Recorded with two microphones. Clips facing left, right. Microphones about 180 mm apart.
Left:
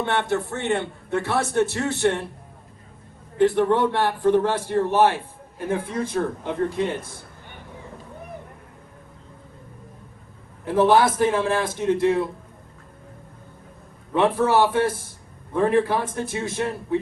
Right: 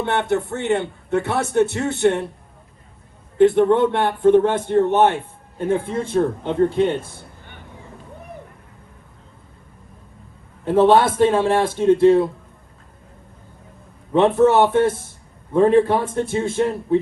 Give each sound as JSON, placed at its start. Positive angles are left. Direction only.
{"t": 0.0, "sound": "a man's voice", "side_deg": -20}
{"t": 3.3, "sound": "a man's voice", "side_deg": -20}
{"t": 10.7, "sound": "a man's voice", "side_deg": -25}
{"t": 14.1, "sound": "a man's voice", "side_deg": -25}